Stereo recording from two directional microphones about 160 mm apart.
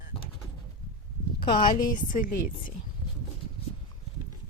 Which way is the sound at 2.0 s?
60° left (ahead or behind).